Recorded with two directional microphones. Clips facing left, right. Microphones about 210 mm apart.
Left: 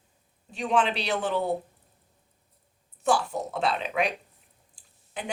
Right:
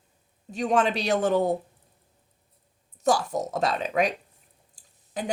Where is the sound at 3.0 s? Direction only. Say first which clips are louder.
Right 2 dB; 40° right (ahead or behind).